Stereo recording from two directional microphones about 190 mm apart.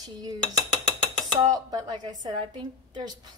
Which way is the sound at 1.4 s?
20° right (ahead or behind).